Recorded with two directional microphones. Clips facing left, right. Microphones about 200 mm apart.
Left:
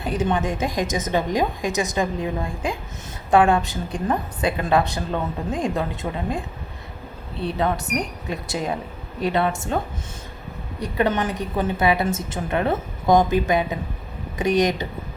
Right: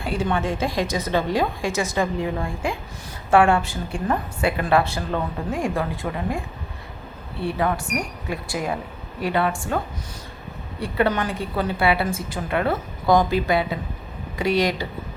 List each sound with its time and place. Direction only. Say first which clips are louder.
0.0 s a woman's voice: left 1 dB; 20° left (ahead or behind)
10.9 s a woman's voice: even; 20° left (ahead or behind)